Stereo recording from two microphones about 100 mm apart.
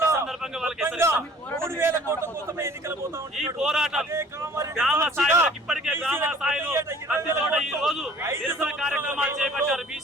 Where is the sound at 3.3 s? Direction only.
5° right (ahead or behind).